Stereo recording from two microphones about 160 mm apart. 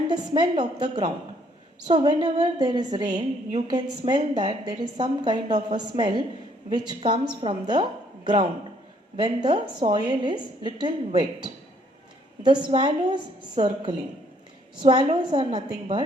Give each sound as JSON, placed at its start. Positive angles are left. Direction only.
{"t": 0.1, "sound": "a woman's voice", "side_deg": -25}
{"t": 14.8, "sound": "a woman's voice", "side_deg": -30}